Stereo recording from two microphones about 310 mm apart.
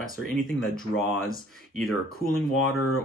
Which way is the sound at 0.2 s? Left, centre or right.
Centre.